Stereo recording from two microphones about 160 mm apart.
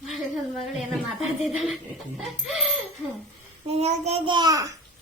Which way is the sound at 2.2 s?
Centre (ahead or behind).